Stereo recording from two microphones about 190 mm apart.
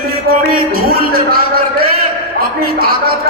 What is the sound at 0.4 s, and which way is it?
Music, 50° right (ahead or behind).